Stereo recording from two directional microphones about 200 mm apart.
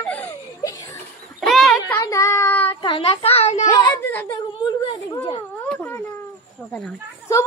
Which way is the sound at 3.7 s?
10° left (ahead or behind).